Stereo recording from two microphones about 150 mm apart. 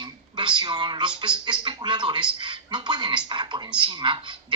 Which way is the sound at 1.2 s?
30° right (ahead or behind).